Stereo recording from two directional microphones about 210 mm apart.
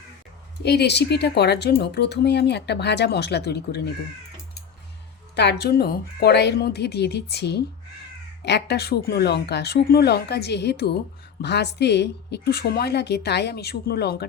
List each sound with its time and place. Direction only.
0.6 s speech: 50° left (ahead or behind)
5.4 s speech: 50° left (ahead or behind)